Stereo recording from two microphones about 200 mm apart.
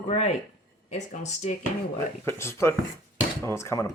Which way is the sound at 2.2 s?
15° left (ahead or behind).